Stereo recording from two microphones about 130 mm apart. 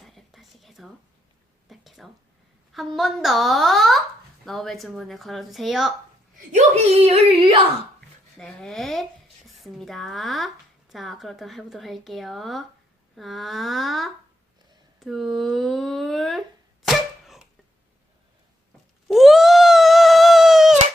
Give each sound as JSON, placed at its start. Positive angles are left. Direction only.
{"t": 0.0, "sound": "a sound", "side_deg": 0}
{"t": 2.7, "sound": "speech", "side_deg": 0}
{"t": 6.5, "sound": "speech", "side_deg": -60}
{"t": 8.4, "sound": "speech", "side_deg": 5}
{"t": 16.8, "sound": "cough", "side_deg": 0}
{"t": 19.0, "sound": "a sound", "side_deg": 0}